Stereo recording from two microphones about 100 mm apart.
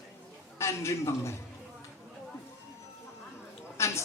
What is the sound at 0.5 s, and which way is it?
Speech, 25° left (ahead or behind).